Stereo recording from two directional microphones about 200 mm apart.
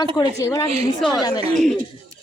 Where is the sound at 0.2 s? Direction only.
15° left (ahead or behind).